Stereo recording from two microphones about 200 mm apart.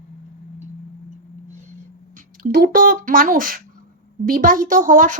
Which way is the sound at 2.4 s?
45° right (ahead or behind).